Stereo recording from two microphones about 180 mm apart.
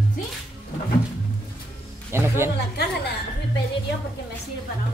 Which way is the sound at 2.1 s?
15° right (ahead or behind).